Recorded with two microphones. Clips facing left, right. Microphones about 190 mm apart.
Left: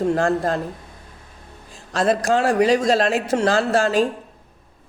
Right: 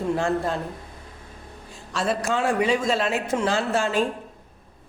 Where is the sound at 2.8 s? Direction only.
90° left.